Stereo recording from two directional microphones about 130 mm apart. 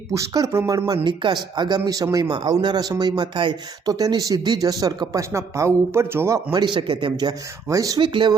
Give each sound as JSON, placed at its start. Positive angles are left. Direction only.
{"t": 0.1, "sound": "speech", "side_deg": -25}
{"t": 1.0, "sound": "speech", "side_deg": -35}
{"t": 2.2, "sound": "speech", "side_deg": -35}
{"t": 6.5, "sound": "speech", "side_deg": -40}
{"t": 8.0, "sound": "speech", "side_deg": -40}